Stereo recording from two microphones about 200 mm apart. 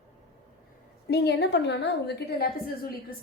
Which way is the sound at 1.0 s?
55° left (ahead or behind).